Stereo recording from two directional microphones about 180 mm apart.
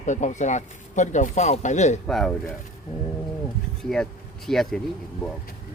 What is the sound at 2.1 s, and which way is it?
Speech, centre (ahead or behind).